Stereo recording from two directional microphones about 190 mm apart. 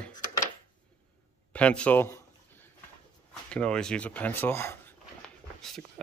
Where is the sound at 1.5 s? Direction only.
5° left (ahead or behind).